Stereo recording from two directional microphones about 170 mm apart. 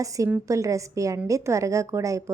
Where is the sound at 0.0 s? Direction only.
20° right (ahead or behind).